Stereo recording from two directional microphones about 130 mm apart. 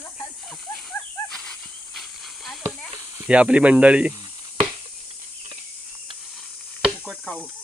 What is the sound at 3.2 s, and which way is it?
Speech, 10° right (ahead or behind).